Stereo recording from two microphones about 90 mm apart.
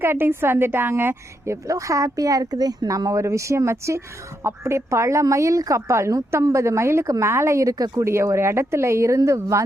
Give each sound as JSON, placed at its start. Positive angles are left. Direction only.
{"t": 0.0, "sound": "a woman's voice", "side_deg": -25}
{"t": 1.6, "sound": "a woman's voice", "side_deg": -35}